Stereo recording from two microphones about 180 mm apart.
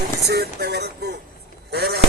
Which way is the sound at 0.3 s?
65° right (ahead or behind).